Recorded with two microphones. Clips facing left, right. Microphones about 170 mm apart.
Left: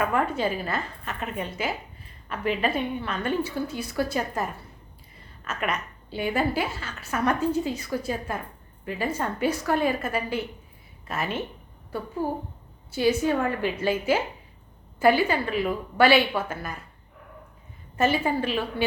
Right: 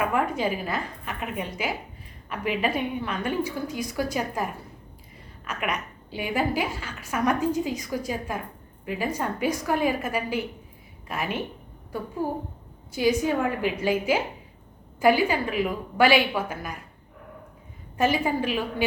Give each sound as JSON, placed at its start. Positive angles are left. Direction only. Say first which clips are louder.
{"t": 0.0, "sound": "a woman's voice", "louder": "even", "side_deg": -10}
{"t": 5.5, "sound": "a woman's voice", "louder": "left 1 dB", "side_deg": -10}
{"t": 17.9, "sound": "a woman's voice", "louder": "even", "side_deg": -10}